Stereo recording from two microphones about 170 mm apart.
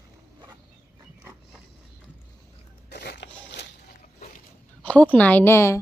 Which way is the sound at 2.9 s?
80° left.